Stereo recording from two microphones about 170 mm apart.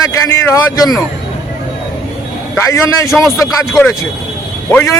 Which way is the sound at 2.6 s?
15° left (ahead or behind).